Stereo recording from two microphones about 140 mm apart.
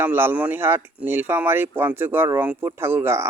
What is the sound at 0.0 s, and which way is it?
Speech, 15° right (ahead or behind).